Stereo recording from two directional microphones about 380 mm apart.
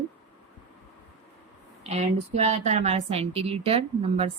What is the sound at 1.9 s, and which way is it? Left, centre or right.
Speech, centre.